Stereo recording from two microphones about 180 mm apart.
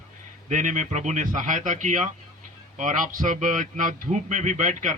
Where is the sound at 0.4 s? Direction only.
45° right (ahead or behind).